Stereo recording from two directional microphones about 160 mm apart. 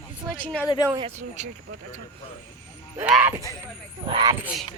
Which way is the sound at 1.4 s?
50° right (ahead or behind).